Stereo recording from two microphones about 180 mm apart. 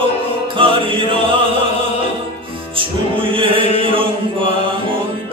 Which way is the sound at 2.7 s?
30° right (ahead or behind).